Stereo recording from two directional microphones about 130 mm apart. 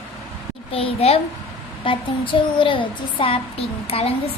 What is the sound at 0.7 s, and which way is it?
A child's voice, 45° left (ahead or behind).